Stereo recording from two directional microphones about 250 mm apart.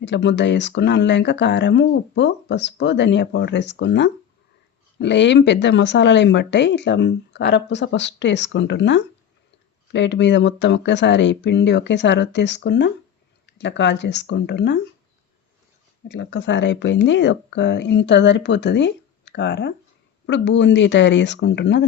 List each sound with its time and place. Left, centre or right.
0.0 s speech: left
16.0 s speech: left